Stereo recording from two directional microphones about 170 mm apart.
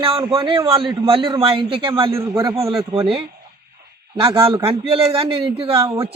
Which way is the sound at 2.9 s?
30° right (ahead or behind).